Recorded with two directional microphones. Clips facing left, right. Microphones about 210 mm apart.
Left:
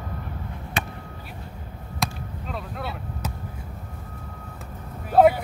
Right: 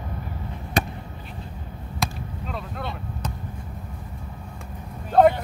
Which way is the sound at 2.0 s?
Centre (ahead or behind).